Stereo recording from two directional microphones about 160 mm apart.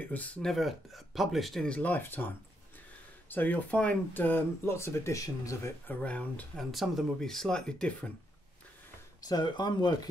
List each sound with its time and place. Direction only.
0.1 s speech: 10° left (ahead or behind)
6.0 s speech: 10° left (ahead or behind)
9.2 s speech: 25° left (ahead or behind)